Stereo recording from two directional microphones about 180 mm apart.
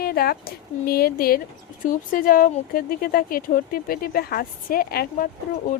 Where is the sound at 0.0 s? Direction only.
60° left (ahead or behind).